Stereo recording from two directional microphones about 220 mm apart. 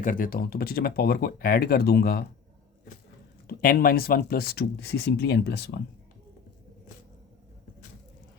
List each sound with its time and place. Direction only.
0.0 s speech: 40° left (ahead or behind)
3.4 s speech: 40° left (ahead or behind)